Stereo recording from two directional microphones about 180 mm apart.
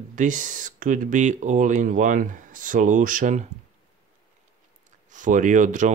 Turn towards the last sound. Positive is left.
turn(degrees=-45)  # may be behind; listen again after turning